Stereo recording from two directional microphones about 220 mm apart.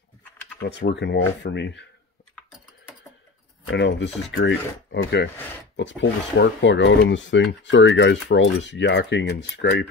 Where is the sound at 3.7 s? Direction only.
50° left (ahead or behind).